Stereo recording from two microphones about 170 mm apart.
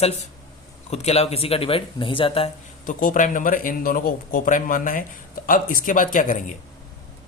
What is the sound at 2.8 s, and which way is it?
Speech, 50° left (ahead or behind).